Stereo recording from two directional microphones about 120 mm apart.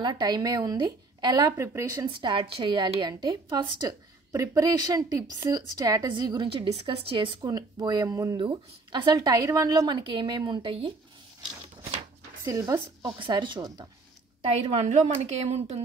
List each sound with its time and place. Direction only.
0.0 s a woman's voice: 35° right (ahead or behind)
2.0 s a woman's voice: 45° right (ahead or behind)
4.3 s a woman's voice: 30° right (ahead or behind); by 7.3 s 50° right (ahead or behind)
7.4 s speech: 35° right (ahead or behind)
8.4 s a woman's voice: 40° right (ahead or behind)
12.4 s speech: 25° right (ahead or behind)
13.2 s a woman's voice: 40° right (ahead or behind)
14.5 s a woman's voice: 65° right (ahead or behind)